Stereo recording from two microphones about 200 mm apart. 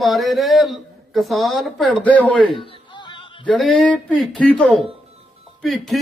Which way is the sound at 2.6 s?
25° left (ahead or behind).